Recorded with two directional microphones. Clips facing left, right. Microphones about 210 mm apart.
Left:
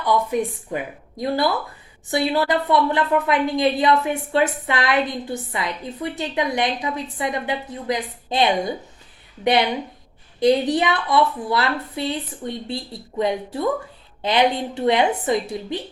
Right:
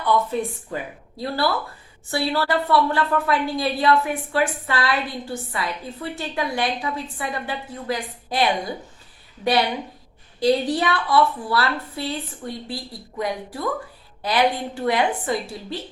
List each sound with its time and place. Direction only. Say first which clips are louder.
0.0 s a woman's voice: left 1 dB; 15° left (ahead or behind)